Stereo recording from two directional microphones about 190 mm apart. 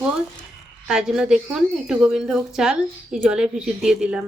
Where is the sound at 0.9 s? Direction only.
5° right (ahead or behind).